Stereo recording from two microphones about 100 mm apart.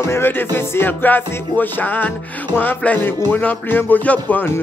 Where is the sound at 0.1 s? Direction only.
20° left (ahead or behind).